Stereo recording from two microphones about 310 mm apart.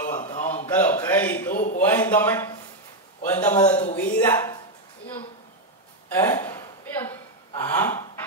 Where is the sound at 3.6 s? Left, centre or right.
Left.